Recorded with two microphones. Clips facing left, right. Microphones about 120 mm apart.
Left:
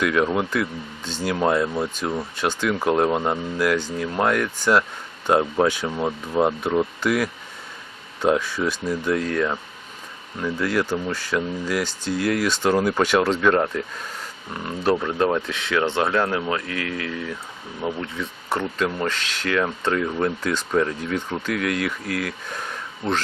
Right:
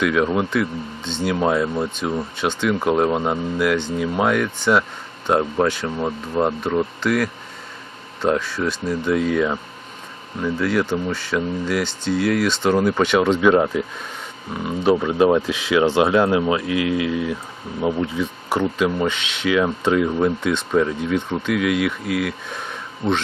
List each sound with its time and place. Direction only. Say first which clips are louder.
0.0 s speech: right 2 dB; centre (ahead or behind); by 18.1 s 20° right (ahead or behind)
18.2 s speech: right 5 dB; centre (ahead or behind)